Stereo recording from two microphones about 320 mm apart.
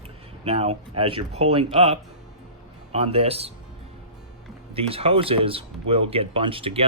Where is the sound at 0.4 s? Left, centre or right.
Centre.